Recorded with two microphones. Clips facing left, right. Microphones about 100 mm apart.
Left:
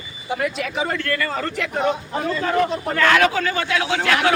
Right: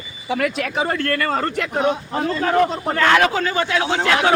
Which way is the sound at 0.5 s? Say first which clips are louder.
Right 2 dB; 50° right (ahead or behind).